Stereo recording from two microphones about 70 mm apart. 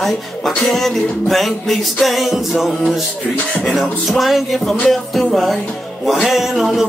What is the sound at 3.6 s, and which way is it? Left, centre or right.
Music, centre.